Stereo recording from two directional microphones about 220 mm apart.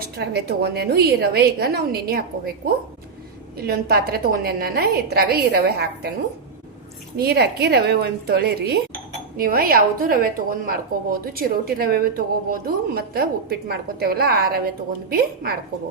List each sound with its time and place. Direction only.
0.2 s a woman's voice: 45° right (ahead or behind)
7.2 s a woman's voice: 45° right (ahead or behind)